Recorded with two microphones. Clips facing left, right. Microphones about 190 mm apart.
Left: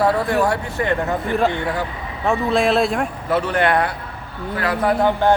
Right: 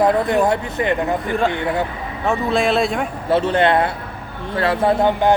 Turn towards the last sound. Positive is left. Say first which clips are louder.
# right 1 dB
turn(degrees=-20)  # may be behind; listen again after turning